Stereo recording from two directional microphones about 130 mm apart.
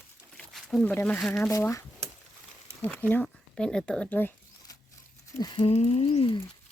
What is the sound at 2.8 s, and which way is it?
Speech, 15° left (ahead or behind).